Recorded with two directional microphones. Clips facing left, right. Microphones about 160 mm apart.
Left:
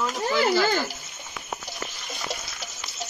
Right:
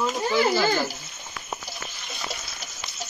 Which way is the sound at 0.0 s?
10° right (ahead or behind).